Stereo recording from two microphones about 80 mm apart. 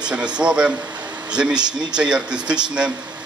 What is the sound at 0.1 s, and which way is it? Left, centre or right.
A man's voice, centre.